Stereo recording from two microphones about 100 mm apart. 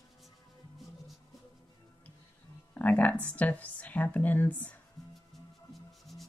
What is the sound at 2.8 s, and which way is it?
Speech, 15° left (ahead or behind).